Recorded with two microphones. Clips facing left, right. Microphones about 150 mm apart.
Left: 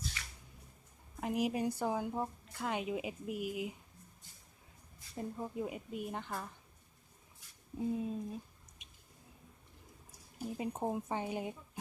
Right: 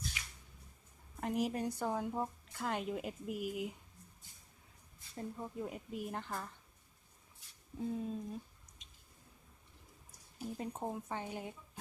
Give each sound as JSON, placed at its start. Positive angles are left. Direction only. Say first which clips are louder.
{"t": 0.2, "sound": "squish", "louder": "left 1 dB", "side_deg": -15}
{"t": 1.2, "sound": "a woman's voice", "louder": "left 2 dB", "side_deg": 5}
{"t": 5.1, "sound": "a woman's voice", "louder": "left 3 dB", "side_deg": 10}
{"t": 7.8, "sound": "a woman's voice", "louder": "left 3 dB", "side_deg": 5}
{"t": 10.6, "sound": "speech", "louder": "left 5 dB", "side_deg": 10}